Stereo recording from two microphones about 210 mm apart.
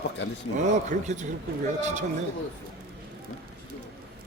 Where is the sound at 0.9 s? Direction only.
35° right (ahead or behind).